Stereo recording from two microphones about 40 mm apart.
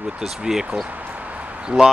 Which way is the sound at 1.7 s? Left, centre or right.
Right.